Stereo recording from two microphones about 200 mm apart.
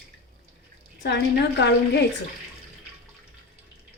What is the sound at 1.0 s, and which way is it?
Speech, 55° left (ahead or behind).